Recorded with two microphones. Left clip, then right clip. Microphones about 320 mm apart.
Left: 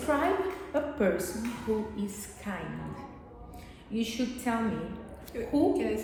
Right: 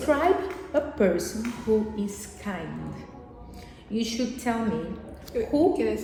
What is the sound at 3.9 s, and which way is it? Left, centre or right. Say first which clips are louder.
Speech: right 4 dB; right.